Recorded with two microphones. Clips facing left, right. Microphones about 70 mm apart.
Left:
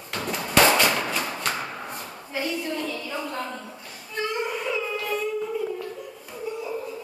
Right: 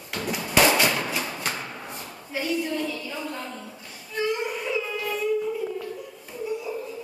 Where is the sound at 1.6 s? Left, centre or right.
Left.